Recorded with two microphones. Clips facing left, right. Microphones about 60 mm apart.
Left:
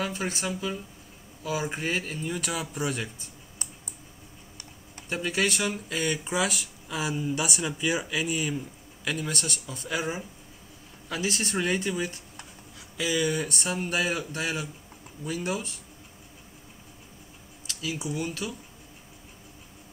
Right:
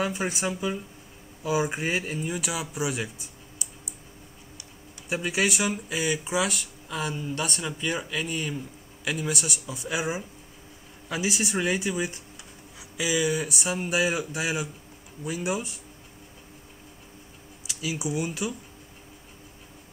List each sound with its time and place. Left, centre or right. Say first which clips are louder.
0.0 s speech: right 3 dB; centre
5.1 s speech: right 1 dB; centre
9.0 s speech: right 2 dB; centre
17.6 s speech: right 2 dB; centre